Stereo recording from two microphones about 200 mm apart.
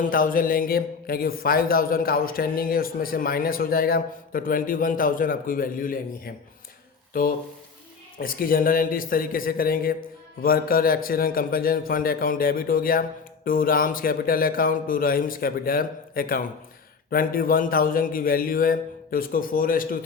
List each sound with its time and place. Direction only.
0.1 s a man's voice: 45° left (ahead or behind)